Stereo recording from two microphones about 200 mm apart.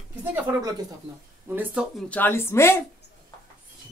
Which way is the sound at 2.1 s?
10° left (ahead or behind).